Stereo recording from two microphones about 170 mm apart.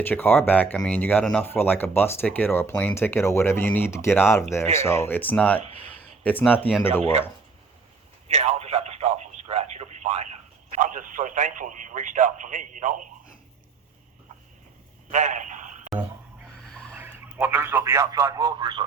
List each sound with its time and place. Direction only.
0.0 s speech: 10° left (ahead or behind)
7.0 s speech: 40° right (ahead or behind)
8.3 s telephone: 40° right (ahead or behind)
10.8 s speech: 50° right (ahead or behind)
15.1 s a sound: 45° right (ahead or behind)
16.9 s a man's voice: 10° right (ahead or behind); by 18.9 s 30° right (ahead or behind)